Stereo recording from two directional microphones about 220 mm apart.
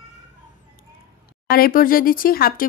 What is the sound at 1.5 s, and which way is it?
Speech, 40° left (ahead or behind).